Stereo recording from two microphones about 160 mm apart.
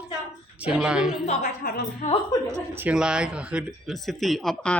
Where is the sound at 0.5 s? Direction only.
10° right (ahead or behind).